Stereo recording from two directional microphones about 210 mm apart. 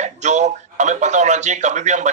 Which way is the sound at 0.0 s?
35° right (ahead or behind).